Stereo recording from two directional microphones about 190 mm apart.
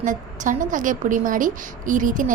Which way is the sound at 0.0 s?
45° right (ahead or behind).